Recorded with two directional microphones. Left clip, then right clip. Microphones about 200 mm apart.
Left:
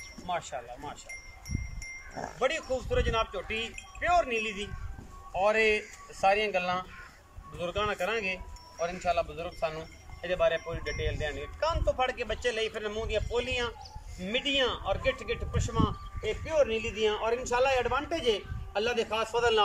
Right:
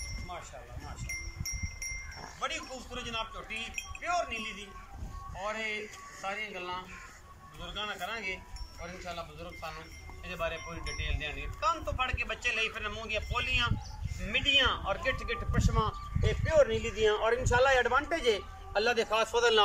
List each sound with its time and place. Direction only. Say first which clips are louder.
0.3 s speech: left 10 dB; 50° left (ahead or behind)
2.4 s a man's voice: left 7 dB; 45° left (ahead or behind); by 19.6 s 5° left (ahead or behind)